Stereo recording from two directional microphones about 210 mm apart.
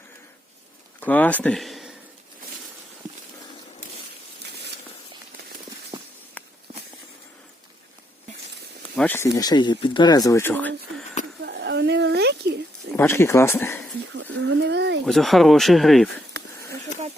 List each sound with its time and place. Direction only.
0.9 s speech: 10° left (ahead or behind)
5.9 s walk: 20° right (ahead or behind)
9.0 s speech: 10° left (ahead or behind)
11.4 s a sound: 55° right (ahead or behind)
13.0 s speech: 10° left (ahead or behind)
14.4 s a sound: 55° right (ahead or behind)
15.0 s speech: centre (ahead or behind)